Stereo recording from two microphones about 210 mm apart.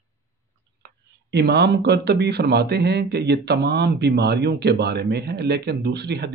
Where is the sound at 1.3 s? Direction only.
50° right (ahead or behind).